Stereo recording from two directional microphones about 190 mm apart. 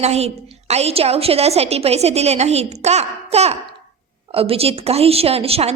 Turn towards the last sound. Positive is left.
turn(degrees=-30)  # may be behind; listen again after turning